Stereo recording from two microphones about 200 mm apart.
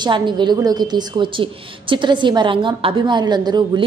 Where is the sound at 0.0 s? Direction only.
25° right (ahead or behind).